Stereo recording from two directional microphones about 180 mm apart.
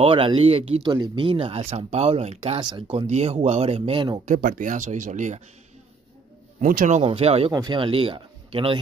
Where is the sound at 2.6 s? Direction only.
25° right (ahead or behind).